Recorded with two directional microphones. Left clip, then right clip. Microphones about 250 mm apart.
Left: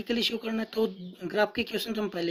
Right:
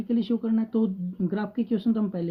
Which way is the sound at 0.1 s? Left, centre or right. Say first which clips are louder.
Right 1 dB; left.